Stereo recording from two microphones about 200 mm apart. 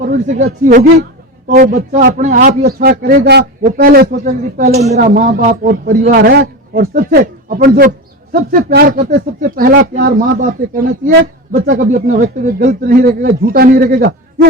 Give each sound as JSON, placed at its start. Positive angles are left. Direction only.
{"t": 0.0, "sound": "speech", "side_deg": -45}
{"t": 11.9, "sound": "speech", "side_deg": -35}